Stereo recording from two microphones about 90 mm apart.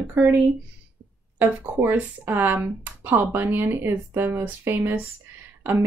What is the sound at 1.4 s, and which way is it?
Speech, 20° right (ahead or behind).